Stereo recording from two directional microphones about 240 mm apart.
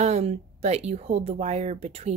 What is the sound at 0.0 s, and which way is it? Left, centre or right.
Speech, right.